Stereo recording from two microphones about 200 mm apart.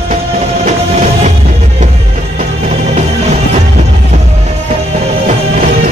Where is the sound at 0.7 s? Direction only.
35° right (ahead or behind).